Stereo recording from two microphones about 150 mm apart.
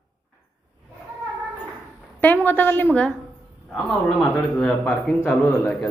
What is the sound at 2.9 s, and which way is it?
A woman's voice, 10° left (ahead or behind).